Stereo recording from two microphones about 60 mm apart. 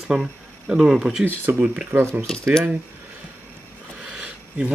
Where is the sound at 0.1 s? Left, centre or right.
Centre.